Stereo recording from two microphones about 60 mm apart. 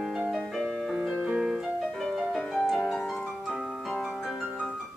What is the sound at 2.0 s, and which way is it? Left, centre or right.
Music, centre.